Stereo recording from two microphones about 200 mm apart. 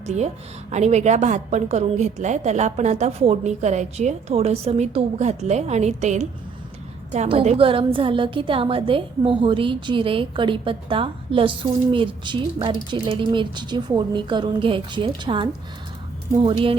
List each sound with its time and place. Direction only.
0.0 s a woman's voice: 35° right (ahead or behind)